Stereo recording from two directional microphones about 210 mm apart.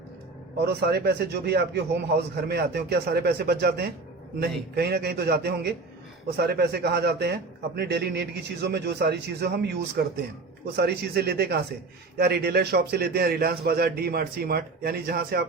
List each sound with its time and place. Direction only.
0.6 s a man's voice: 50° right (ahead or behind)